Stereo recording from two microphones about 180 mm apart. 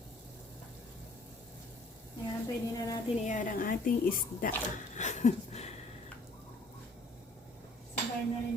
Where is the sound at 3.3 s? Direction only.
45° left (ahead or behind).